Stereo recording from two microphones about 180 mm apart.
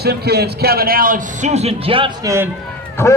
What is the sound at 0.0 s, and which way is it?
A man's voice, 60° right (ahead or behind).